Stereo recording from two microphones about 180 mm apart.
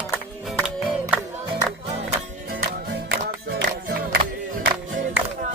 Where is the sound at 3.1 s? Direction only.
60° right (ahead or behind).